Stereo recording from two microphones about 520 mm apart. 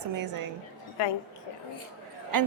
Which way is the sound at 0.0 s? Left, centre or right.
Right.